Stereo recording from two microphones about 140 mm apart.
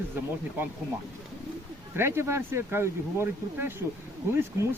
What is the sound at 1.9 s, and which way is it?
Speech, 15° right (ahead or behind).